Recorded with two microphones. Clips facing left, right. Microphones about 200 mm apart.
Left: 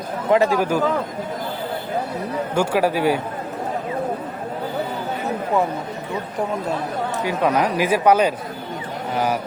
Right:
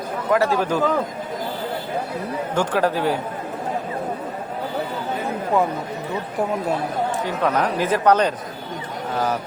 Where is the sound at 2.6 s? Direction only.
10° left (ahead or behind).